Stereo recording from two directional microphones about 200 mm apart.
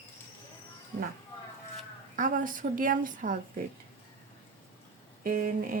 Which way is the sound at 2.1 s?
40° right (ahead or behind).